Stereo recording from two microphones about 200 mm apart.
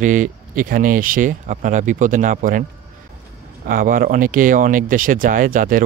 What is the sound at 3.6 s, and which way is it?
Speech, 45° right (ahead or behind).